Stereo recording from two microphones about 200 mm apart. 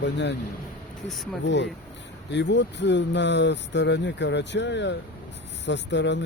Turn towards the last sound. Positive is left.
turn(degrees=60)  # may be behind; listen again after turning